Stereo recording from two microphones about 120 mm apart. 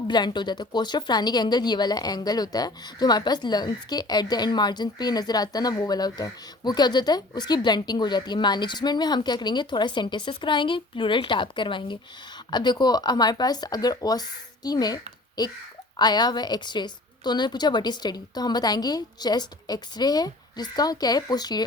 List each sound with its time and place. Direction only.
0.1 s speech: 40° left (ahead or behind)